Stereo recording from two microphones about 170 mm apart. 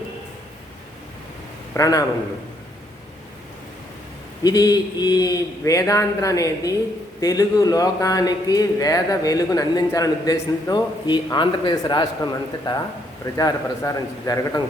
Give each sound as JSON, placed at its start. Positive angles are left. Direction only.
{"t": 1.7, "sound": "speech", "side_deg": 20}
{"t": 4.4, "sound": "speech", "side_deg": 20}